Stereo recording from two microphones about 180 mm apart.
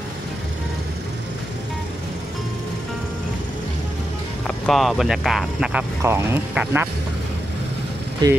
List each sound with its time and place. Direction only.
4.5 s speech: centre (ahead or behind)
8.2 s speech: 25° right (ahead or behind)